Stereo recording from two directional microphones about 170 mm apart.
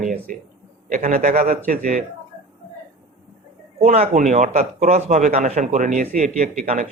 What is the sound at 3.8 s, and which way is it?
A man's voice, 40° right (ahead or behind).